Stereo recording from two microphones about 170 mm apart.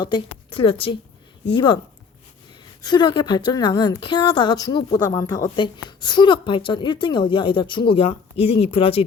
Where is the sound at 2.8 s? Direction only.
25° left (ahead or behind).